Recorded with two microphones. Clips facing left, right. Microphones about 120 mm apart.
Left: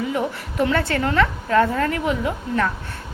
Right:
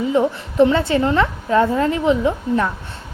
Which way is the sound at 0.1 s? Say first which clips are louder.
Right 6 dB; 25° right (ahead or behind).